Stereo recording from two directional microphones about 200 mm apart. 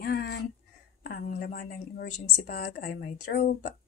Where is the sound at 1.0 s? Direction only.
45° left (ahead or behind).